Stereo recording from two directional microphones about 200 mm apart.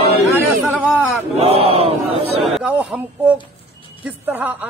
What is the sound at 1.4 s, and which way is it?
Chant, 30° right (ahead or behind).